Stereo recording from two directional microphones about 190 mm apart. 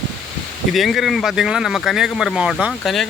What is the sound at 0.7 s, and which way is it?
Speech, centre (ahead or behind).